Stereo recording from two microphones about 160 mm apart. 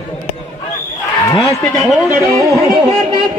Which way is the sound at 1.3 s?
20° left (ahead or behind).